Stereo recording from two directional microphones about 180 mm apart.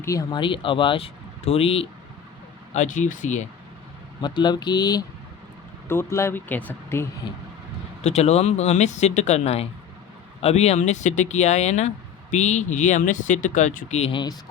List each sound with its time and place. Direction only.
0.0 s speech: 20° left (ahead or behind)
2.7 s speech: 45° left (ahead or behind)
4.2 s speech: 25° left (ahead or behind)
8.0 s speech: 35° left (ahead or behind)